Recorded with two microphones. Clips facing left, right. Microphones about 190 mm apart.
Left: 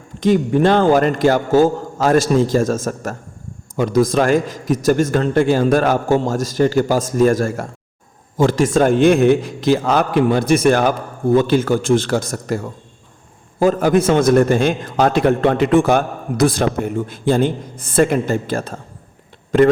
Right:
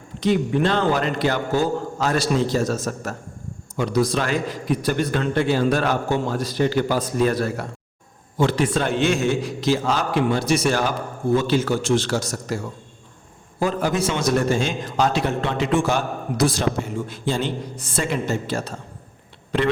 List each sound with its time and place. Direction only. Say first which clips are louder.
0.2 s a man's voice: left 5 dB; 45° left (ahead or behind)